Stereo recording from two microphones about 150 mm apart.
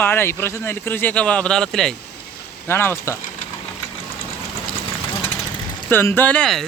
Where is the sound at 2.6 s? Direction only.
15° left (ahead or behind).